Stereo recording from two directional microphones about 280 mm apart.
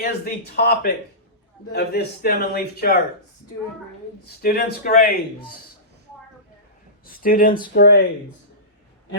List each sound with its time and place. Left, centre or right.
0.0 s a man's voice: left
4.4 s a man's voice: left
7.0 s a man's voice: left